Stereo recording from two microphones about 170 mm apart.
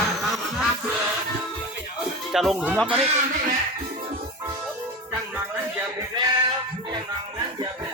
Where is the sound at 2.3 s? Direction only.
Centre (ahead or behind).